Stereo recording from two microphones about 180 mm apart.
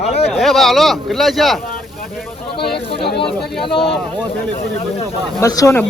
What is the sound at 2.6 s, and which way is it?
Speech, 60° left (ahead or behind).